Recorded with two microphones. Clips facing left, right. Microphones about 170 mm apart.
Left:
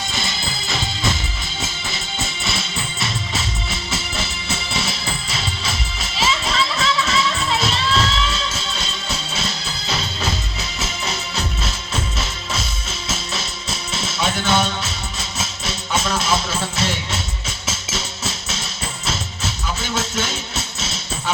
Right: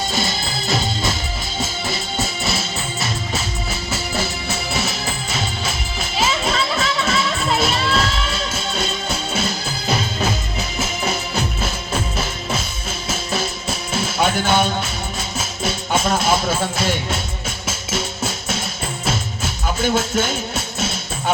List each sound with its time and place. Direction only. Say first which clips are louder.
0.1 s music: right 4 dB; 50° right (ahead or behind)
5.3 s music: right 2 dB; 50° right (ahead or behind)
10.8 s music: right 4 dB; 55° right (ahead or behind)
13.1 s music: right 5 dB; 55° right (ahead or behind)